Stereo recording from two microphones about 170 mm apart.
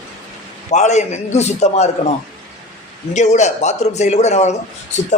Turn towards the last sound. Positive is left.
turn(degrees=40)  # may be behind; listen again after turning